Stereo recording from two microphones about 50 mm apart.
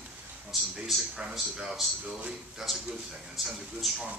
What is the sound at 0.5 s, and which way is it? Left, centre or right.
Speech, centre.